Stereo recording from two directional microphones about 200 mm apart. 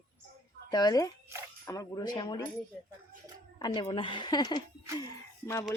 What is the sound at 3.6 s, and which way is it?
Speech, 20° left (ahead or behind).